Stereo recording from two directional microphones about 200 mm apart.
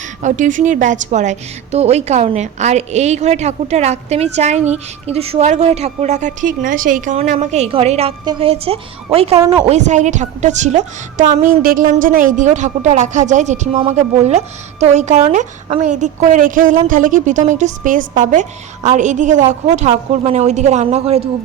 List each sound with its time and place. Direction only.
0.2 s a woman's voice: 40° right (ahead or behind)
9.3 s speech: 20° right (ahead or behind)
9.6 s a woman's voice: 35° right (ahead or behind)